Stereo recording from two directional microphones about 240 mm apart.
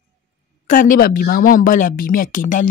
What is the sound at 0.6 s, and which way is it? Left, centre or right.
Speech, left.